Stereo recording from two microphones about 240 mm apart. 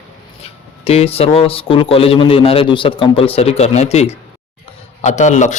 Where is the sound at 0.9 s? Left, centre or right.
Left.